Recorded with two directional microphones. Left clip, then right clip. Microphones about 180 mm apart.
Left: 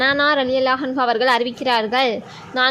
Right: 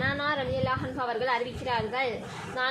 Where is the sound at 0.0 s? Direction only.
65° left (ahead or behind).